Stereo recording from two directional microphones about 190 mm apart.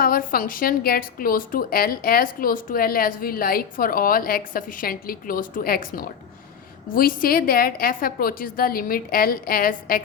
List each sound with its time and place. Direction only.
0.0 s a woman's voice: 50° left (ahead or behind)